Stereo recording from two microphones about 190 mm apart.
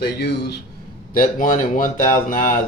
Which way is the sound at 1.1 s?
45° left (ahead or behind).